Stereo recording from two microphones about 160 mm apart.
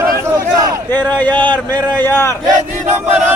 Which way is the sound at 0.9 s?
10° left (ahead or behind).